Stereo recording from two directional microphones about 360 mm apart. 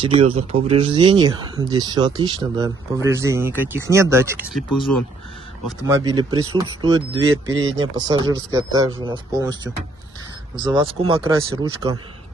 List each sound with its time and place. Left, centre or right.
0.0 s speech: centre
5.7 s speech: centre